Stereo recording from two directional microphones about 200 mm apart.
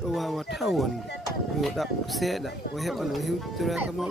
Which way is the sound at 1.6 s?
Centre (ahead or behind).